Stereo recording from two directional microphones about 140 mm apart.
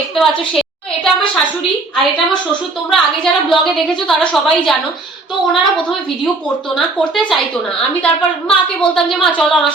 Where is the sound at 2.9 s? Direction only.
Centre (ahead or behind).